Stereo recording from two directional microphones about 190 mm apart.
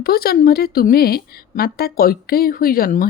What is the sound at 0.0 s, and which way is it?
A woman's voice, 55° left (ahead or behind).